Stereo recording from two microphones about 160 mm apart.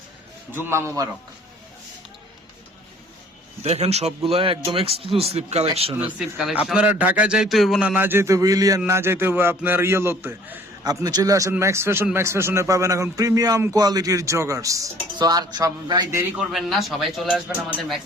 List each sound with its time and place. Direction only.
0.5 s a man's voice: 15° right (ahead or behind)
3.6 s speech: 40° right (ahead or behind)
6.1 s a man's voice: centre (ahead or behind); by 16.2 s 25° right (ahead or behind)
16.4 s a man's voice: centre (ahead or behind)